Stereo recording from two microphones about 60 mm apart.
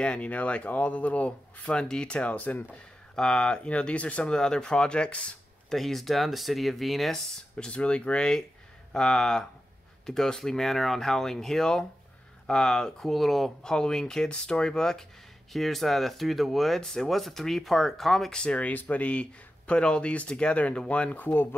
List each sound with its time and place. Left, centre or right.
0.0 s speech: centre
3.2 s speech: centre
4.2 s speech: centre
5.7 s speech: centre
7.5 s speech: centre
18.3 s speech: centre; by 21.5 s left